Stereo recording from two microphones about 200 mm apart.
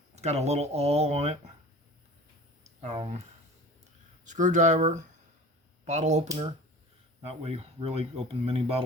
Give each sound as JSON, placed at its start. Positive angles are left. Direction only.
{"t": 0.2, "sound": "speech", "side_deg": -35}
{"t": 2.6, "sound": "speech", "side_deg": -35}
{"t": 4.3, "sound": "speech", "side_deg": -40}
{"t": 7.3, "sound": "speech", "side_deg": -30}